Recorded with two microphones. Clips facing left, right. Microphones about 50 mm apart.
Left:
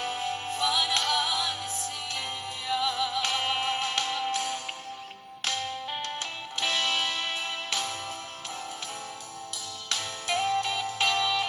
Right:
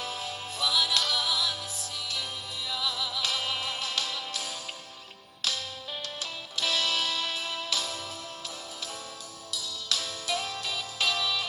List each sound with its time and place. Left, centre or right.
0.0 s music: left
9.5 s music: left